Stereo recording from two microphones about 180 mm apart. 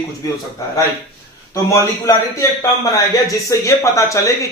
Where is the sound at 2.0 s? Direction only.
20° left (ahead or behind).